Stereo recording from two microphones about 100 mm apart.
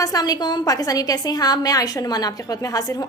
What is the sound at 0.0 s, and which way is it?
A woman's voice, 40° left (ahead or behind).